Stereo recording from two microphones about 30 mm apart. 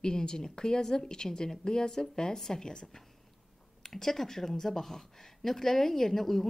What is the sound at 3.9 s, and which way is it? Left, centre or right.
A woman's voice, centre.